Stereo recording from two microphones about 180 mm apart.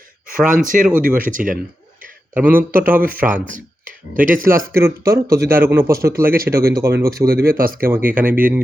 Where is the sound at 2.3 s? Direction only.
10° right (ahead or behind).